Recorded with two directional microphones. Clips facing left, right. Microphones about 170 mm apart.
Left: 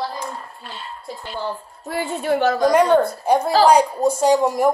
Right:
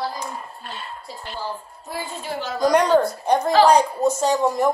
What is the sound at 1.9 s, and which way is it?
Speech, 65° left (ahead or behind).